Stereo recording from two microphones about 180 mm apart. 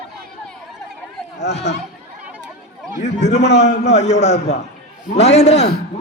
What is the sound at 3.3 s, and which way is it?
A man's voice, 40° left (ahead or behind).